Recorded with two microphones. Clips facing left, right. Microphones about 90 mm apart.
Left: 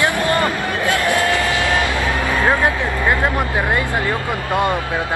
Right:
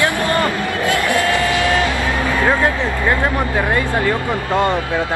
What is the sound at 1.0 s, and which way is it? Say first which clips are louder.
Speech: right 1 dB; 20° left (ahead or behind).